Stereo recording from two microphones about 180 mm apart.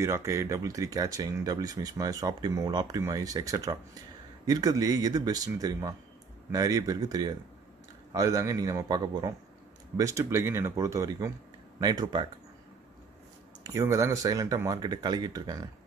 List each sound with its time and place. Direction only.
0.0 s speech: 15° right (ahead or behind)
13.7 s speech: 15° right (ahead or behind)